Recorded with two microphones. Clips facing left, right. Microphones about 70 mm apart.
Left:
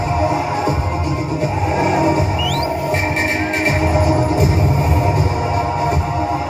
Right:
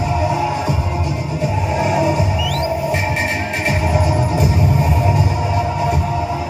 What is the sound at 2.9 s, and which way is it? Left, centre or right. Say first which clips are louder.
Music: left 1 dB; left.